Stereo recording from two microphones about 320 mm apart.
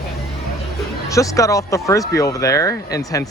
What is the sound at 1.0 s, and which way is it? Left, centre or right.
Speech, centre.